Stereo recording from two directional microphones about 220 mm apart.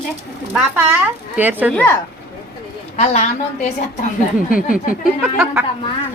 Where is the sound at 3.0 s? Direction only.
30° left (ahead or behind).